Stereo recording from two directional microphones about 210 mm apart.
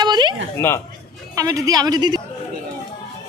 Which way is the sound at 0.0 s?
20° right (ahead or behind).